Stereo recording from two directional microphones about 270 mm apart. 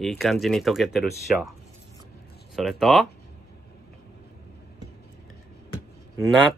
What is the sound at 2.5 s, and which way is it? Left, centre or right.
Speech, centre.